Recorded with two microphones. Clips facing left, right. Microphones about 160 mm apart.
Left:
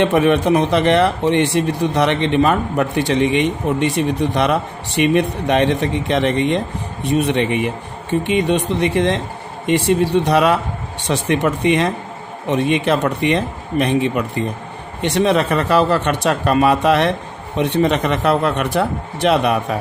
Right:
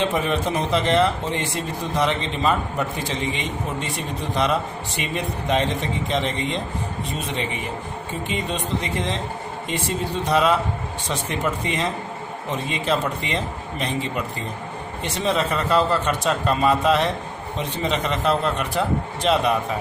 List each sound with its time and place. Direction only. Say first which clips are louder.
0.0 s speech: left 8 dB; 65° left (ahead or behind)